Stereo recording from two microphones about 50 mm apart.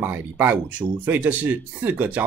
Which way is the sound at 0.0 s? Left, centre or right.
Right.